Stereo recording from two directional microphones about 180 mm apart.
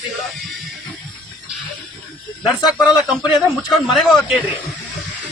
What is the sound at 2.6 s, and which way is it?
A man's voice, 5° right (ahead or behind).